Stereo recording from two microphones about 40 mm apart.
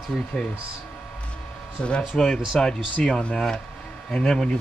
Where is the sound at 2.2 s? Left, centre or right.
Centre.